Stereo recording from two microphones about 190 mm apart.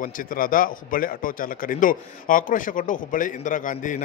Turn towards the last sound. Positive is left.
turn(degrees=45)  # may be behind; listen again after turning